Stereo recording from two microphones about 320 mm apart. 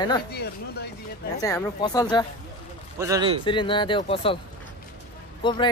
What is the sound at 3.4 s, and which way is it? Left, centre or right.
Speech, centre.